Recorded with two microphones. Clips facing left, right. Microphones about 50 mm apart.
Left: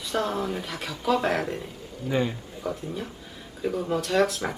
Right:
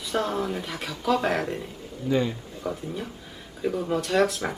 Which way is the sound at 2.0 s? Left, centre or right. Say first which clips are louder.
Right 2 dB; centre.